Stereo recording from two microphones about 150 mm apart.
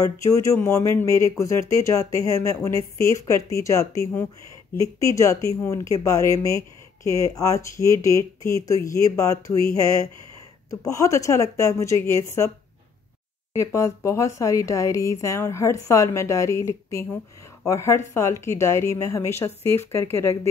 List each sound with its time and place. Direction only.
0.0 s speech: 20° left (ahead or behind)
13.6 s a woman's voice: 20° left (ahead or behind)